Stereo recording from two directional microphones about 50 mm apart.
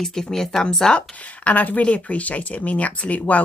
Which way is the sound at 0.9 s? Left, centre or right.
Left.